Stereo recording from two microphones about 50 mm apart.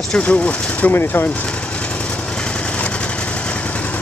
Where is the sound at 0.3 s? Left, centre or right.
Left.